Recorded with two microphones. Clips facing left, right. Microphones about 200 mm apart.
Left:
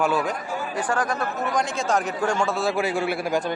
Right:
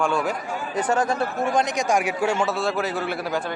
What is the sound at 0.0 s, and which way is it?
Speech, 5° left (ahead or behind).